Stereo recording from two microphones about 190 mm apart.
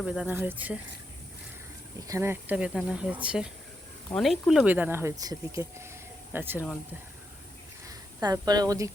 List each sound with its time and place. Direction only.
0.0 s speech: 5° right (ahead or behind)
2.0 s speech: 15° right (ahead or behind)
7.9 s speech: 20° right (ahead or behind)